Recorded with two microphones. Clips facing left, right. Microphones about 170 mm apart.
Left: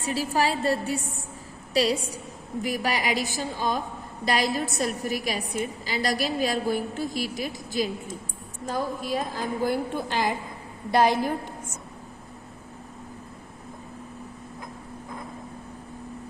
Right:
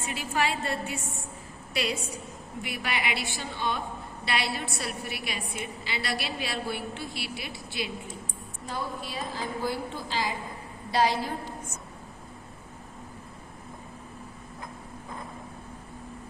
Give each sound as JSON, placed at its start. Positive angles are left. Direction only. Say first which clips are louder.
{"t": 0.0, "sound": "a woman's voice", "louder": "left 4 dB", "side_deg": 35}